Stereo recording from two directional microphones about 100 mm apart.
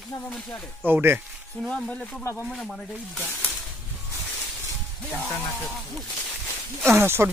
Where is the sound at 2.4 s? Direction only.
5° left (ahead or behind).